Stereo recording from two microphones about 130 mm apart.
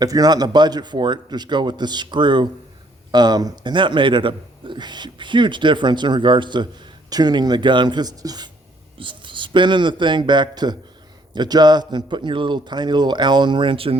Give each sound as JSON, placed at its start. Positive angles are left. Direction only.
{"t": 0.0, "sound": "a man's voice", "side_deg": -30}